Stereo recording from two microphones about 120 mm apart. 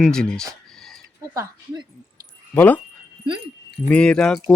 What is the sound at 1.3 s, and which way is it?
Speech, 35° right (ahead or behind).